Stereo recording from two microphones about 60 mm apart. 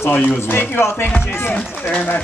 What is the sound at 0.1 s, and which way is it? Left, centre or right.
Speech, left.